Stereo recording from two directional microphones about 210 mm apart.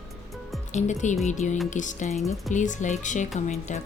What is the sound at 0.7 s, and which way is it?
Speech, 35° left (ahead or behind).